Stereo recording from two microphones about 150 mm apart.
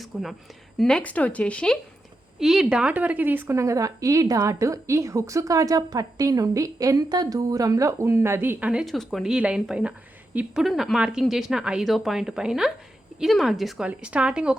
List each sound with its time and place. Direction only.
0.0 s a woman's voice: centre (ahead or behind)